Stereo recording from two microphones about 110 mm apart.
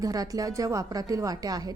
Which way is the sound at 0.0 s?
35° right (ahead or behind).